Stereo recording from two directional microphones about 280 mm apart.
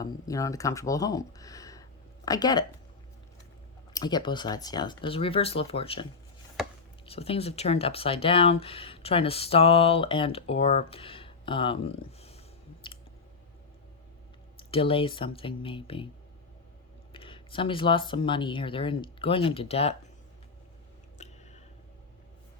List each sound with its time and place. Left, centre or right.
0.0 s speech: centre
3.9 s speech: centre
6.6 s chopping: centre
7.0 s speech: left
12.8 s clicking: centre
14.7 s speech: centre
17.1 s speech: centre
21.2 s a sound: left